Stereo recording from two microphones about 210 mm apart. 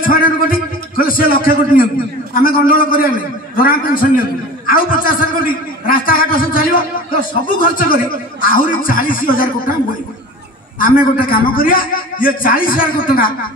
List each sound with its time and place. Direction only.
0.0 s a man's voice: 40° left (ahead or behind)
10.8 s a man's voice: 40° left (ahead or behind)